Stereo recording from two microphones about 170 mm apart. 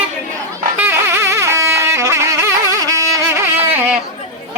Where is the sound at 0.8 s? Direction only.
15° right (ahead or behind).